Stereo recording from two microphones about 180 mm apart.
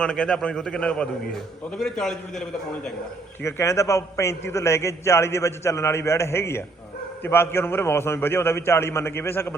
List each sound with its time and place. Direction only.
0.0 s a man's voice: 5° left (ahead or behind)
3.4 s a man's voice: 15° left (ahead or behind)